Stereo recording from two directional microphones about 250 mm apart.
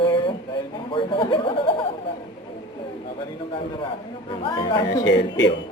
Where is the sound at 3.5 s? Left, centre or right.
Left.